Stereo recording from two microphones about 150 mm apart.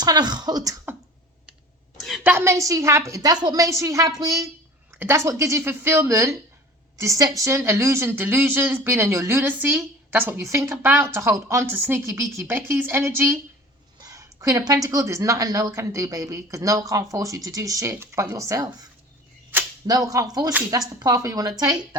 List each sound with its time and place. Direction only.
0.0 s a woman's voice: 30° right (ahead or behind)
2.0 s a sound: centre (ahead or behind)
2.2 s a woman's voice: 15° right (ahead or behind)
19.9 s a woman's voice: 25° right (ahead or behind)